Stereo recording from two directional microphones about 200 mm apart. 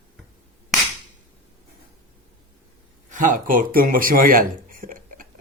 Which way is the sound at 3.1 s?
40° right (ahead or behind).